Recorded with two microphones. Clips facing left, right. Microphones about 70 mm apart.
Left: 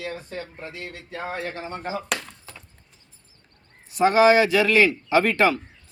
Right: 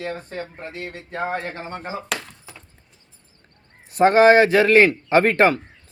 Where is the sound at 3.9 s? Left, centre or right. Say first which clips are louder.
Right 3 dB; right.